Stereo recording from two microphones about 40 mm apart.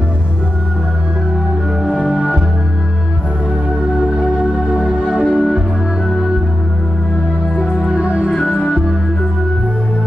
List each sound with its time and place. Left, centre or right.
2.1 s music: centre
5.1 s music: centre
7.5 s music: left
7.9 s music: right
8.3 s music: centre